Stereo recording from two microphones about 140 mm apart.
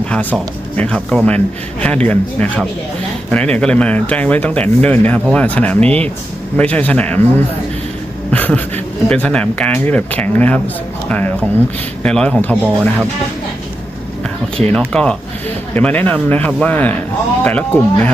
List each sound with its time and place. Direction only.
0.1 s speech: 10° left (ahead or behind)
14.9 s speech: 5° left (ahead or behind)